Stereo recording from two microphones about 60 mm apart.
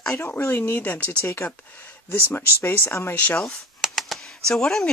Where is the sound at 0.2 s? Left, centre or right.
Left.